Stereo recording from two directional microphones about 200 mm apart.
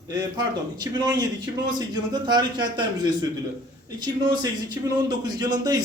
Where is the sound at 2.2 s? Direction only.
20° right (ahead or behind).